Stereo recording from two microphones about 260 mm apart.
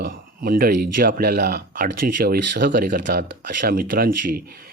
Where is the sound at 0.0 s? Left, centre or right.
Right.